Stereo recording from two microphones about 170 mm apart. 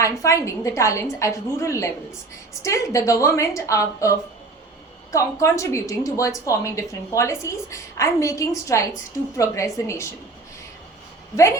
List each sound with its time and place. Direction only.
0.0 s a woman's voice: 20° left (ahead or behind)